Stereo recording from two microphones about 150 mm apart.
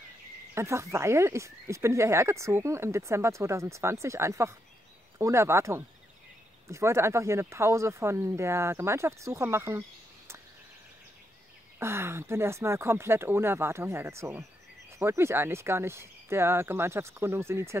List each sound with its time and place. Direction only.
0.6 s speech: 20° right (ahead or behind)
11.8 s speech: 15° right (ahead or behind)